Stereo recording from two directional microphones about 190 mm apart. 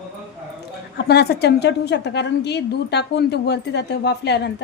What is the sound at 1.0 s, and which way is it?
A woman's voice, 55° left (ahead or behind).